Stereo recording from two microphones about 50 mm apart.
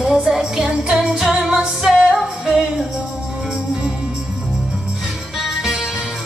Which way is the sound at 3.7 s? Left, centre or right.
Centre.